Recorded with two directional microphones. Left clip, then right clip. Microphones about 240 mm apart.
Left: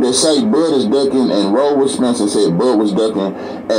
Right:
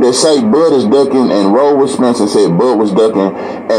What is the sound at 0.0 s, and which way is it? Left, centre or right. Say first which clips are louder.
A man's voice: right 4 dB; right.